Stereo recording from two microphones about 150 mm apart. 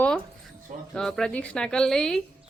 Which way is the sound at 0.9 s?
5° left (ahead or behind).